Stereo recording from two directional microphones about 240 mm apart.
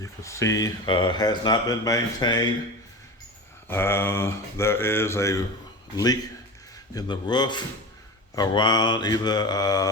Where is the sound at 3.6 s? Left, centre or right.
Centre.